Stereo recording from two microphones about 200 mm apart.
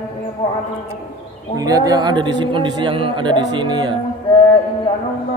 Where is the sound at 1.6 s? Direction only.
20° right (ahead or behind).